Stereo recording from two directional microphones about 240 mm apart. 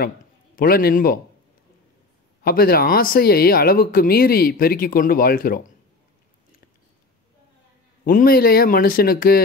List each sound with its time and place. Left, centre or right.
0.6 s speech: left
2.4 s speech: left
8.0 s speech: left